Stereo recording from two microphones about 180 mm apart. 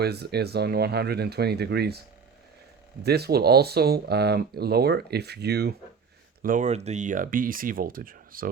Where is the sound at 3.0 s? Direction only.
60° right (ahead or behind).